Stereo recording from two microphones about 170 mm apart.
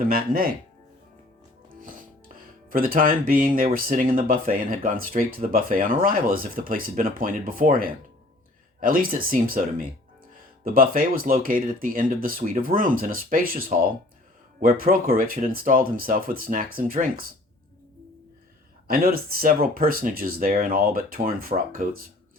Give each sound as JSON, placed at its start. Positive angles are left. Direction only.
{"t": 0.0, "sound": "speech", "side_deg": -60}
{"t": 1.7, "sound": "music", "side_deg": -55}
{"t": 2.6, "sound": "speech", "side_deg": -55}
{"t": 18.9, "sound": "speech", "side_deg": -60}